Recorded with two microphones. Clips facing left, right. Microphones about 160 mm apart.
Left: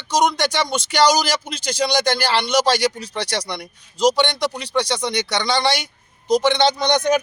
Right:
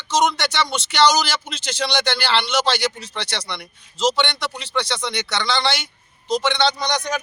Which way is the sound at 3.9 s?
15° left (ahead or behind).